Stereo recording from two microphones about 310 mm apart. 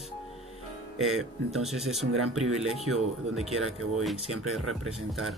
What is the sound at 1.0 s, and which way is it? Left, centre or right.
Speech, centre.